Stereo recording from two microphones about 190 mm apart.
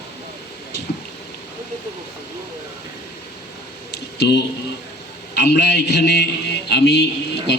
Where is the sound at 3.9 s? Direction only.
60° left (ahead or behind).